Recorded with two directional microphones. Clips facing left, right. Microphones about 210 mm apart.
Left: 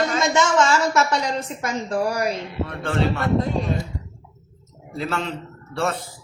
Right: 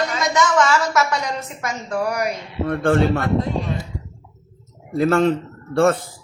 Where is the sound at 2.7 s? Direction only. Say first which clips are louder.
Right 7 dB; 50° right (ahead or behind).